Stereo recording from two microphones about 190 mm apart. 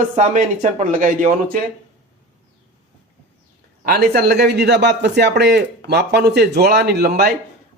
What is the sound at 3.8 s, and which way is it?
Speech, 55° right (ahead or behind).